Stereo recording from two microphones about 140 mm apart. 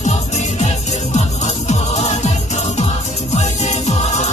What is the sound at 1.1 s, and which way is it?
Music, 55° left (ahead or behind).